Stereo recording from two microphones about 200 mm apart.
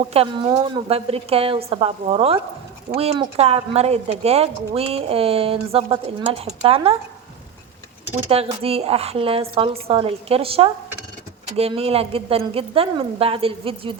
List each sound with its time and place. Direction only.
0.0 s speech: 30° right (ahead or behind)
8.1 s speech: 30° right (ahead or behind)